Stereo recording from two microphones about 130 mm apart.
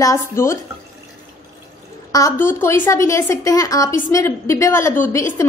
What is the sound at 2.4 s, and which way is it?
A woman's voice, 15° left (ahead or behind).